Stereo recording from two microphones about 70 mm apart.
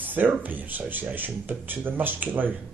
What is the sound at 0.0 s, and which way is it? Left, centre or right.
Speech, right.